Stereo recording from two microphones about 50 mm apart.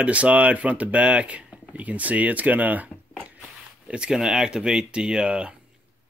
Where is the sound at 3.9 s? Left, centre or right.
Centre.